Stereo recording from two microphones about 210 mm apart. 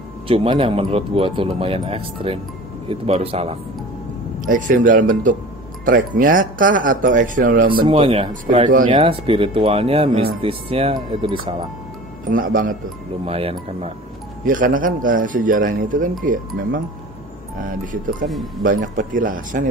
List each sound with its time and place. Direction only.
0.3 s speech: 25° right (ahead or behind)
4.4 s speech: 40° right (ahead or behind)
7.8 s speech: 25° right (ahead or behind)
12.3 s speech: 40° right (ahead or behind)
13.2 s speech: 30° right (ahead or behind)
14.4 s speech: 40° right (ahead or behind)
18.6 s speech: 40° right (ahead or behind)